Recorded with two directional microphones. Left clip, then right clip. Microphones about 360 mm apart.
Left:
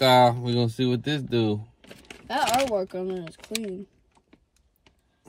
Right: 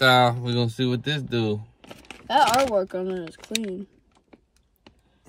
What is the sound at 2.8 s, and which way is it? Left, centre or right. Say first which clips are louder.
Speech: right 4 dB; right.